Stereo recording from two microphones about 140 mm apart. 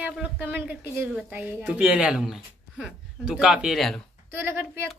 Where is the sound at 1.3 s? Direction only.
5° right (ahead or behind).